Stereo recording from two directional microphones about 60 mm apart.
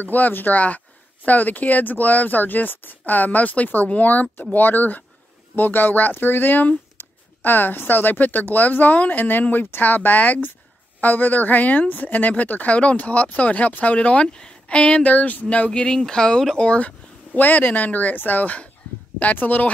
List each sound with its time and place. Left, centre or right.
0.0 s speech: left